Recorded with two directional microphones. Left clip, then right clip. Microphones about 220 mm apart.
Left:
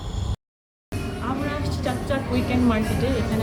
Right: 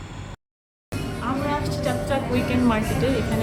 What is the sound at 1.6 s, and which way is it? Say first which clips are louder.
Music: right 2 dB; 10° right (ahead or behind).